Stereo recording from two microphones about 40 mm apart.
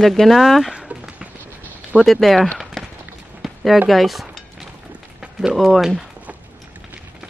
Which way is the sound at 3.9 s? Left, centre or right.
Centre.